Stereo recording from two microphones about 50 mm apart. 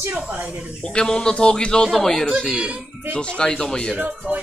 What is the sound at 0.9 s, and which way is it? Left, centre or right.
Speech, centre.